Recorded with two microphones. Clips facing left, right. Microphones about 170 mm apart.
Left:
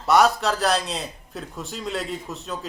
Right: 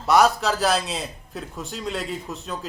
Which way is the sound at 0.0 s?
Centre (ahead or behind).